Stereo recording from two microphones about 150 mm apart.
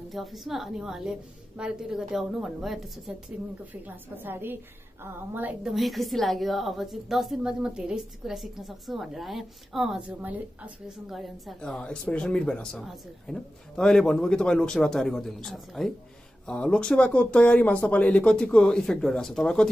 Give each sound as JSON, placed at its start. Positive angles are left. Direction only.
{"t": 0.1, "sound": "a woman's voice", "side_deg": 0}
{"t": 3.7, "sound": "a woman's voice", "side_deg": -10}